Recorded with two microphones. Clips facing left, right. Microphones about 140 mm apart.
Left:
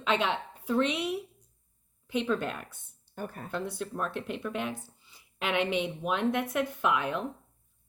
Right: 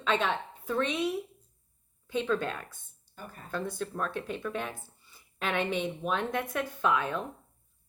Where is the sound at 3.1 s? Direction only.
50° left (ahead or behind).